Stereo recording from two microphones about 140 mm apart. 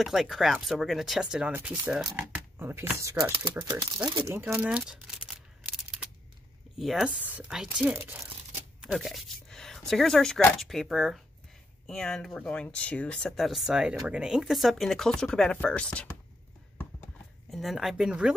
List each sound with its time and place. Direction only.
0.0 s speech: centre (ahead or behind); by 4.3 s 30° right (ahead or behind)
4.3 s a sound: 15° right (ahead or behind)
6.8 s speech: centre (ahead or behind)
8.8 s speech: centre (ahead or behind)
17.5 s speech: centre (ahead or behind)